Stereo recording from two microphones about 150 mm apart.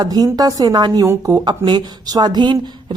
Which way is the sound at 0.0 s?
25° right (ahead or behind).